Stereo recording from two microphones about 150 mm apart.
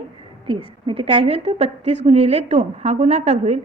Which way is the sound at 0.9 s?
35° right (ahead or behind).